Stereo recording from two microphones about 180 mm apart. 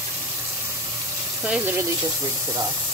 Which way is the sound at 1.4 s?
10° right (ahead or behind).